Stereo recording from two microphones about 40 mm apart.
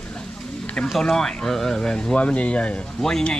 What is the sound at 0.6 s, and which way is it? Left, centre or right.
Music, left.